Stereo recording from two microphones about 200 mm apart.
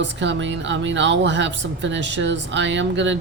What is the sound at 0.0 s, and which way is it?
Speech, 65° right (ahead or behind).